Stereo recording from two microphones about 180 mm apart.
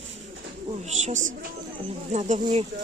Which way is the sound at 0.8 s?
40° right (ahead or behind).